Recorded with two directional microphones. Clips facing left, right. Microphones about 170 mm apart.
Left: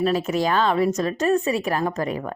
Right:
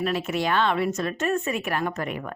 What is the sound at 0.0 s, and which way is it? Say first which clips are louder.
Speech: left 4 dB; 40° left (ahead or behind).